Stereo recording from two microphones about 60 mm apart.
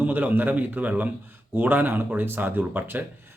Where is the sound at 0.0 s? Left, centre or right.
Right.